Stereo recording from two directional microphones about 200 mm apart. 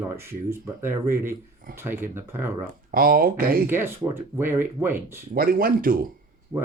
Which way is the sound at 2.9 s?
45° right (ahead or behind).